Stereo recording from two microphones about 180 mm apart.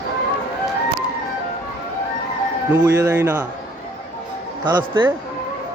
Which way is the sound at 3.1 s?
10° right (ahead or behind).